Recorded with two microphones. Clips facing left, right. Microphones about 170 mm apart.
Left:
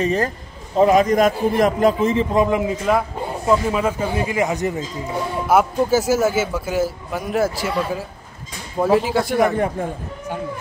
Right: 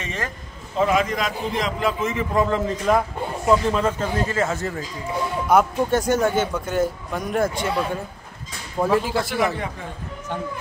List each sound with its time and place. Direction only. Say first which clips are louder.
0.0 s a man's voice: left 10 dB; 35° left (ahead or behind)
2.3 s a man's voice: left 3 dB; 15° left (ahead or behind)
5.5 s a man's voice: left 2 dB; 5° left (ahead or behind)
9.8 s a man's voice: left 9 dB; 50° left (ahead or behind)